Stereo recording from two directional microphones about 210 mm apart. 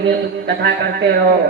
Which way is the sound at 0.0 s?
50° right (ahead or behind).